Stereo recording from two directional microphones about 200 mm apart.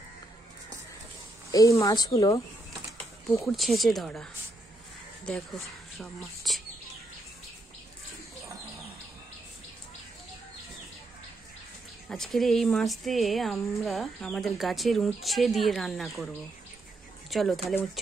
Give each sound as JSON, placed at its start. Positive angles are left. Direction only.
{"t": 1.5, "sound": "speech", "side_deg": 15}
{"t": 3.3, "sound": "speech", "side_deg": 0}
{"t": 5.9, "sound": "speech", "side_deg": 0}
{"t": 12.1, "sound": "speech", "side_deg": 0}
{"t": 17.3, "sound": "speech", "side_deg": 0}